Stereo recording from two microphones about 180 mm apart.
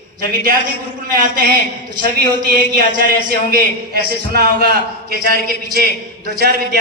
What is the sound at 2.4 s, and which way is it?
A man's voice, 55° right (ahead or behind).